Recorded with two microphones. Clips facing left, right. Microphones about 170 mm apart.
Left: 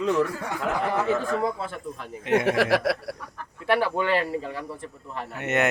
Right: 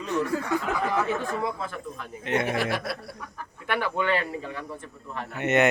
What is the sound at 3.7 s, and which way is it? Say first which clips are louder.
Speech: left 3 dB; 30° left (ahead or behind).